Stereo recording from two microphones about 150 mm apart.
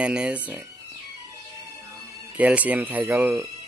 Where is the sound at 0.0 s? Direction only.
5° right (ahead or behind).